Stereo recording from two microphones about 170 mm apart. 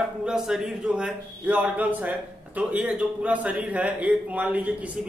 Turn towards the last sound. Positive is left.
turn(degrees=-10)  # may be behind; listen again after turning